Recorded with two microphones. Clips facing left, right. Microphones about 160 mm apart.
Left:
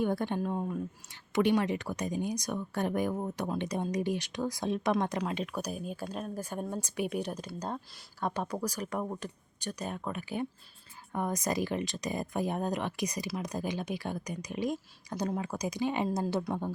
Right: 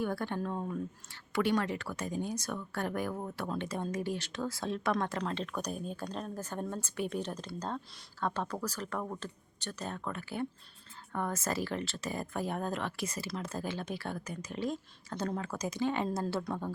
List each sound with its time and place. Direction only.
0.0 s speech: 20° left (ahead or behind)